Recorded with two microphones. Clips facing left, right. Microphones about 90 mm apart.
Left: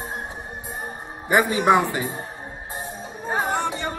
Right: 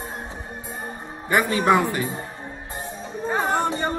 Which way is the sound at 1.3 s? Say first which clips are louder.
Left 1 dB; 20° left (ahead or behind).